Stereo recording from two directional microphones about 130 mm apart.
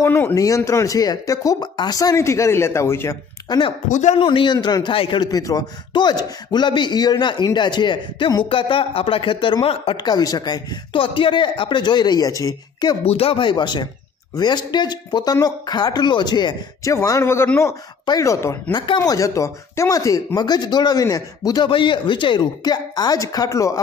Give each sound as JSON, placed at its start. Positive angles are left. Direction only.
{"t": 0.0, "sound": "speech", "side_deg": 20}
{"t": 3.4, "sound": "speech", "side_deg": 40}
{"t": 3.9, "sound": "a man's voice", "side_deg": 65}
{"t": 4.2, "sound": "speech", "side_deg": 40}
{"t": 13.0, "sound": "speech", "side_deg": 50}
{"t": 21.6, "sound": "speech", "side_deg": 40}